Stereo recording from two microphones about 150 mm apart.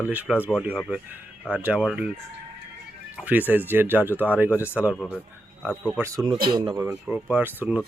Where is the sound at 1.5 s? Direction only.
10° right (ahead or behind).